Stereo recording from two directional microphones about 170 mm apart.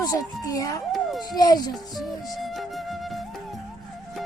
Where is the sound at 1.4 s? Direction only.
25° left (ahead or behind).